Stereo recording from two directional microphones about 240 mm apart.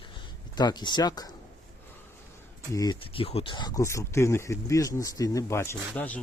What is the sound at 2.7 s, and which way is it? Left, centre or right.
Speech, centre.